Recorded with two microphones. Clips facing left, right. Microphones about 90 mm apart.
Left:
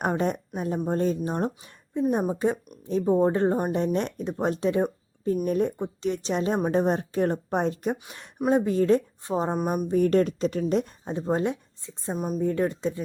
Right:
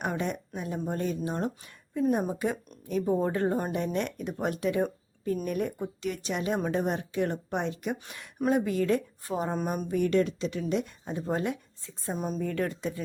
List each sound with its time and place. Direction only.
0.1 s a woman's voice: 40° left (ahead or behind)
9.9 s speech: 40° left (ahead or behind); by 12.1 s 20° left (ahead or behind)
12.1 s speech: 5° left (ahead or behind)
12.4 s speech: 25° left (ahead or behind)